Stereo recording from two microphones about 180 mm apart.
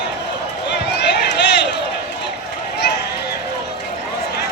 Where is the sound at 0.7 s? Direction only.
70° left (ahead or behind).